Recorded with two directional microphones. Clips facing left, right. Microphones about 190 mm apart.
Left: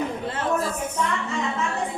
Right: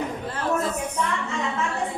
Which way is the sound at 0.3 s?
25° left (ahead or behind).